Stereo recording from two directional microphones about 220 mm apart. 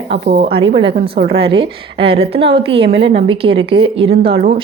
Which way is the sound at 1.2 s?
25° right (ahead or behind).